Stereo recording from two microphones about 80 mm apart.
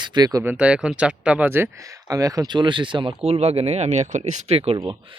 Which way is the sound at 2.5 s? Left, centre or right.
Right.